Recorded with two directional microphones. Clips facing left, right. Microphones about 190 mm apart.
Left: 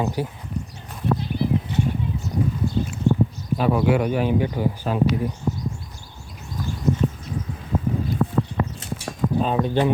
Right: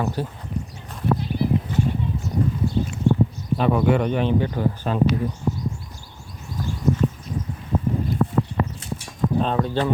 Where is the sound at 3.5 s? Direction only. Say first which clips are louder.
Even; 5° left (ahead or behind).